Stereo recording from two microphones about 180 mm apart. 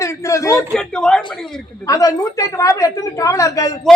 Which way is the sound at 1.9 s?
20° left (ahead or behind).